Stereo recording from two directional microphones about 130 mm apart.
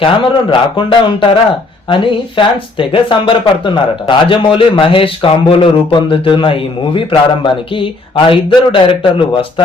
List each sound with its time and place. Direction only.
0.0 s speech: 40° left (ahead or behind)